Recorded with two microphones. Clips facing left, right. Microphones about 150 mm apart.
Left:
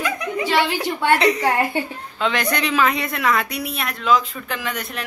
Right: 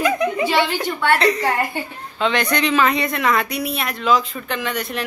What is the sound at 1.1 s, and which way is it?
Speech, 15° left (ahead or behind).